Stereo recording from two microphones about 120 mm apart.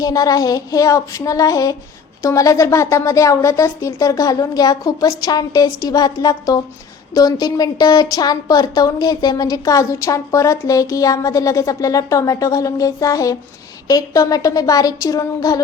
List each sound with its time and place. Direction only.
0.0 s a woman's voice: 30° left (ahead or behind)